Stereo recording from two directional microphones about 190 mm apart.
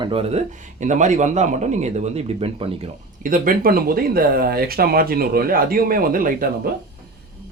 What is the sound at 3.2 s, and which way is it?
Speech, 45° right (ahead or behind).